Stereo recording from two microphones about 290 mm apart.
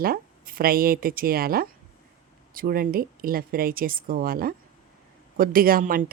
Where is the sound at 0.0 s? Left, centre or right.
Right.